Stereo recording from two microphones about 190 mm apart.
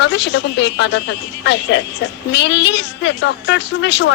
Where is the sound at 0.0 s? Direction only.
65° left (ahead or behind).